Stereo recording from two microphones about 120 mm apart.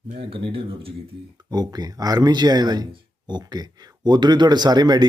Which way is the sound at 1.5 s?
35° right (ahead or behind).